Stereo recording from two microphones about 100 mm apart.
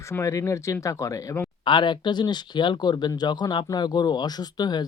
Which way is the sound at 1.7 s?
50° left (ahead or behind).